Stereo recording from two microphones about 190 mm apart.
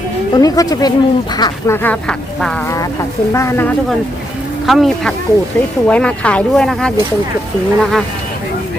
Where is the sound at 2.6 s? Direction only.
15° left (ahead or behind).